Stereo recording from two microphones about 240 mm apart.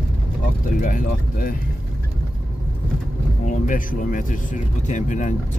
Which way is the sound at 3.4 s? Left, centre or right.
Left.